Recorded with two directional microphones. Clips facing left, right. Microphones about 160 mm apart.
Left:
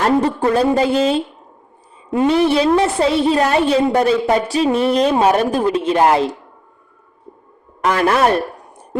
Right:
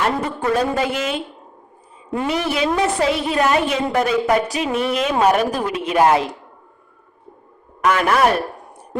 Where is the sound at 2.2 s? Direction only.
30° left (ahead or behind).